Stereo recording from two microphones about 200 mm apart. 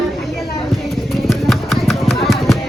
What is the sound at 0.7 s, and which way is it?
Music, centre (ahead or behind).